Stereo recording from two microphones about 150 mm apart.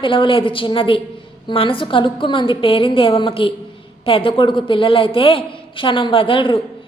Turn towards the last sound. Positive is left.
turn(degrees=35)  # may be behind; listen again after turning